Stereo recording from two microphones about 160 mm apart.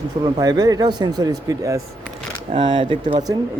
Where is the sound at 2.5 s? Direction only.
30° right (ahead or behind).